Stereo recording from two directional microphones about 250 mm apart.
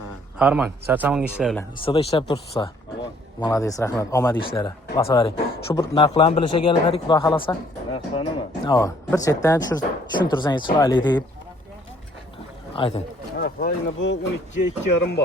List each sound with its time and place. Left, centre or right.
0.3 s speech: centre
1.8 s speech: left
12.7 s speech: left
13.3 s speech: left